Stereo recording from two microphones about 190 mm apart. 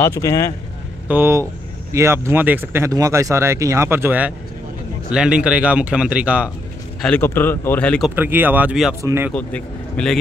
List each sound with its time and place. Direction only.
0.0 s speech: 15° left (ahead or behind)
1.0 s speech: 10° right (ahead or behind)
7.0 s speech: 10° left (ahead or behind)
8.2 s speech: 10° right (ahead or behind)
9.3 s speech: 5° left (ahead or behind)